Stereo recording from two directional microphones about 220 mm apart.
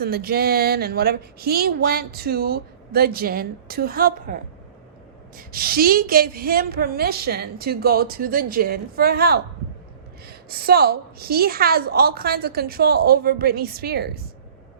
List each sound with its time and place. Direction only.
0.0 s a woman's voice: 45° right (ahead or behind)
5.4 s a woman's voice: 40° right (ahead or behind)